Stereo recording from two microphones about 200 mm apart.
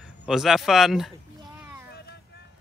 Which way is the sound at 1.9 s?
55° left (ahead or behind).